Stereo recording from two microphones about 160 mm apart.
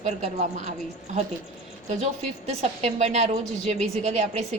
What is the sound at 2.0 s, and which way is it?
A woman's voice, 45° right (ahead or behind).